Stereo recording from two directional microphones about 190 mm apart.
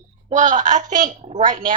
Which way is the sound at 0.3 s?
40° right (ahead or behind).